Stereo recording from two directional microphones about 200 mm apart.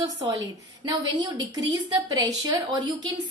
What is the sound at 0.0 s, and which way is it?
Speech, 20° right (ahead or behind).